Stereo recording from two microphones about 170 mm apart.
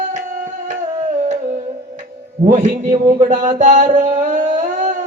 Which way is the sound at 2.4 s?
45° right (ahead or behind).